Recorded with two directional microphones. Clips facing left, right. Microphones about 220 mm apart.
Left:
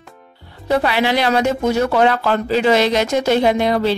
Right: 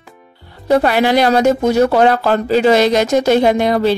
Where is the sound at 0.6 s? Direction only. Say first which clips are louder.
Right 4 dB; 45° right (ahead or behind).